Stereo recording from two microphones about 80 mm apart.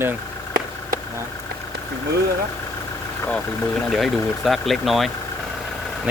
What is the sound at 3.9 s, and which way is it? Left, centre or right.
Speech, centre.